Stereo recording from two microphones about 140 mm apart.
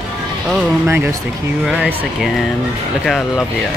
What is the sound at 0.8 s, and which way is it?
Speech, 15° right (ahead or behind).